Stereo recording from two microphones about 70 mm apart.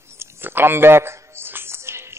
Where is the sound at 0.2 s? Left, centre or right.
Right.